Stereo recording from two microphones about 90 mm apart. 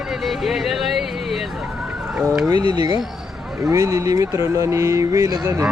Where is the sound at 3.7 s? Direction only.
35° right (ahead or behind).